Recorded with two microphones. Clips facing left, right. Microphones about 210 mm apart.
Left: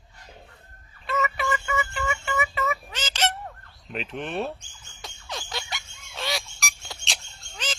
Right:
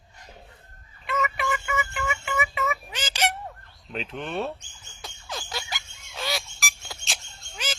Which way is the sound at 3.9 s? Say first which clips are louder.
Even; centre (ahead or behind).